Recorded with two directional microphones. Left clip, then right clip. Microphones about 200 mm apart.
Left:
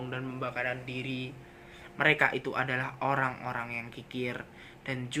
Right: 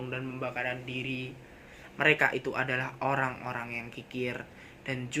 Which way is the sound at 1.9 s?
15° left (ahead or behind).